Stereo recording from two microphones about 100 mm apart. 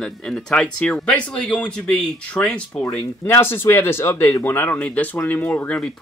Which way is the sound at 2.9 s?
25° left (ahead or behind).